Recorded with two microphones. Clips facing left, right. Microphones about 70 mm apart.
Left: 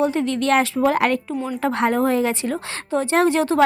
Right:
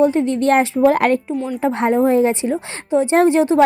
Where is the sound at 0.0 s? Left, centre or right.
Right.